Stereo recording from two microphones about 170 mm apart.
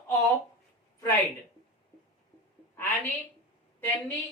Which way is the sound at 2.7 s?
10° left (ahead or behind).